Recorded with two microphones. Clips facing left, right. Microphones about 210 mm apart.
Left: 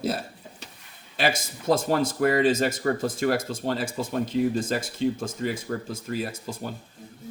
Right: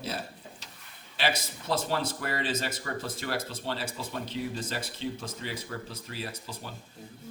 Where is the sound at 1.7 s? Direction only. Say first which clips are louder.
Left 7 dB; 50° left (ahead or behind).